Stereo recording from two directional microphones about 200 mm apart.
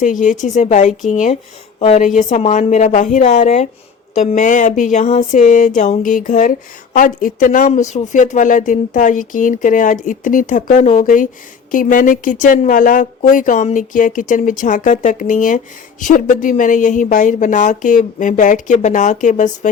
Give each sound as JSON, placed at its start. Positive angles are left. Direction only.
{"t": 0.0, "sound": "speech", "side_deg": 40}